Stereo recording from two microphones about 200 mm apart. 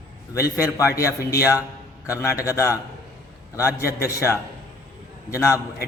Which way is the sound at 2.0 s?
15° left (ahead or behind).